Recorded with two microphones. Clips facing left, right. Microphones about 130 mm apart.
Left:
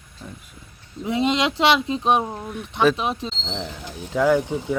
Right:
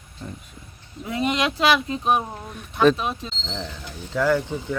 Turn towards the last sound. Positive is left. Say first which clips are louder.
# left 3 dB
turn(degrees=20)  # may be behind; listen again after turning